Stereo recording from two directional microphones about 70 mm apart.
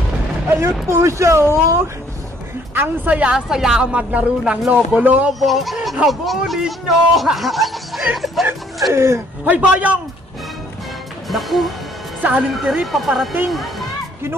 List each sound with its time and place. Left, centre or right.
0.8 s speech: right
3.2 s speech: centre
5.4 s speech: centre
8.9 s speech: right
9.5 s a man's voice: right
11.2 s speech: centre
12.2 s speech: right
12.8 s speech: centre